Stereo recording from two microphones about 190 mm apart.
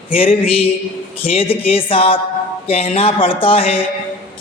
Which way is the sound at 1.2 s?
30° left (ahead or behind).